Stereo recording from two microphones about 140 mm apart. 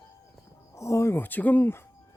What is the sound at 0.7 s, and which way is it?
Speech, 20° left (ahead or behind).